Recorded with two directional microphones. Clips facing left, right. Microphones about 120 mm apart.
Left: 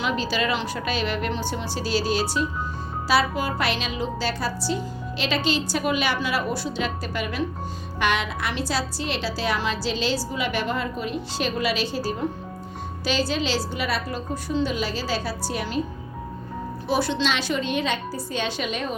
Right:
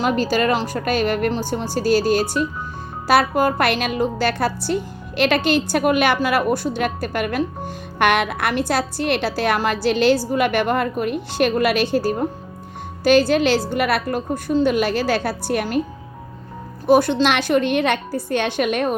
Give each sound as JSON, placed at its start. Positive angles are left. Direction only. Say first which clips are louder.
{"t": 0.0, "sound": "a woman's voice", "louder": "right 6 dB", "side_deg": -45}
{"t": 16.8, "sound": "a woman's voice", "louder": "right 9 dB", "side_deg": -50}